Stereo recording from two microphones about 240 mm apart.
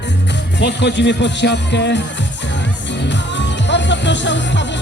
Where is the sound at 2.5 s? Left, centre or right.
Left.